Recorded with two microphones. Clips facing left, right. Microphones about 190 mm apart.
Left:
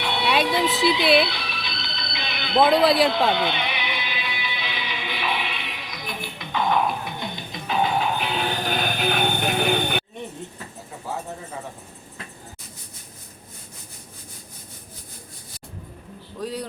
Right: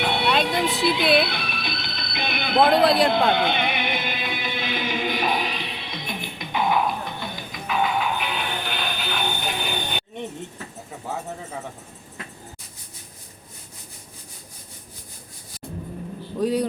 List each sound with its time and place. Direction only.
0.0 s a sound: 50° right (ahead or behind)
0.4 s speech: 50° right (ahead or behind)
3.1 s music: 55° right (ahead or behind); by 6.7 s 10° right (ahead or behind)
7.0 s music: 20° left (ahead or behind); by 10.0 s 60° left (ahead or behind)
16.4 s a man's voice: 15° right (ahead or behind)